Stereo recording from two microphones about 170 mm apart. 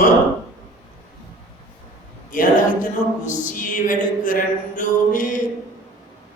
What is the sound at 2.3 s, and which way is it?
Speech, 50° left (ahead or behind).